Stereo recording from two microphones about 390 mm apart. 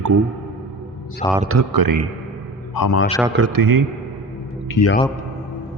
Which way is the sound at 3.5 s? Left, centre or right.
Right.